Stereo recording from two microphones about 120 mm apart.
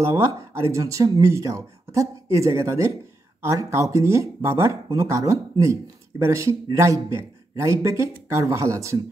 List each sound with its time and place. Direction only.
0.0 s speech: 25° right (ahead or behind)